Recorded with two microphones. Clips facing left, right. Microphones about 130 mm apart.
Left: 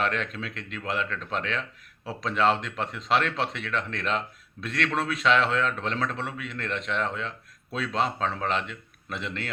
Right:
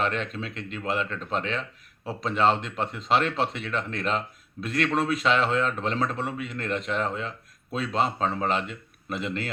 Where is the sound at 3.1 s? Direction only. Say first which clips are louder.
Right 2 dB; 35° right (ahead or behind).